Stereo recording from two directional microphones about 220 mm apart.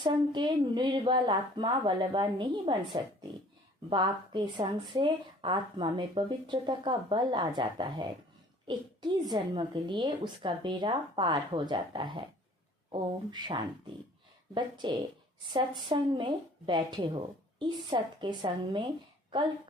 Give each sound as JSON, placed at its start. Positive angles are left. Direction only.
{"t": 0.0, "sound": "speech", "side_deg": -20}